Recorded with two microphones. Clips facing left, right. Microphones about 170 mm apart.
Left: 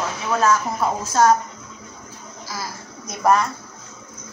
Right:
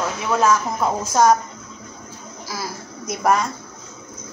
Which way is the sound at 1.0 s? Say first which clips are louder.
Right 1 dB; 15° right (ahead or behind).